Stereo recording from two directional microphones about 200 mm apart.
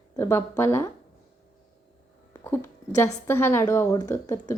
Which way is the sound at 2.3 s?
10° left (ahead or behind).